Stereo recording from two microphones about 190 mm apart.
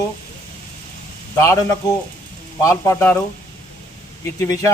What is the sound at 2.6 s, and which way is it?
Speech, 15° left (ahead or behind).